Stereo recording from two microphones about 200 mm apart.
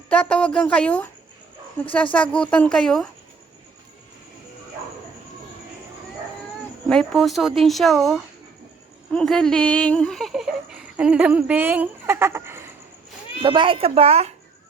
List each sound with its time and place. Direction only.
0.1 s speech: 5° left (ahead or behind)
6.8 s speech: 5° left (ahead or behind); by 12.7 s 10° right (ahead or behind)
13.4 s a woman's voice: 25° right (ahead or behind)